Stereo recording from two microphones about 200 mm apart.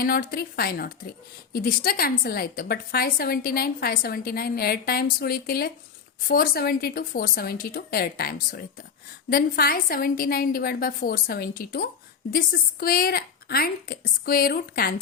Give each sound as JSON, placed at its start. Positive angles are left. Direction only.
{"t": 0.0, "sound": "a woman's voice", "side_deg": 50}